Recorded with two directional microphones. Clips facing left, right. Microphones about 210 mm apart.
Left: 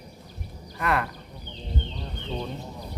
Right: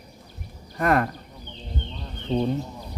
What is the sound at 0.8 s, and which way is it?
Speech, 45° right (ahead or behind).